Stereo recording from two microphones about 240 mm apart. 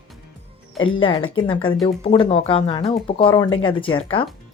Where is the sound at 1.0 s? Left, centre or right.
Left.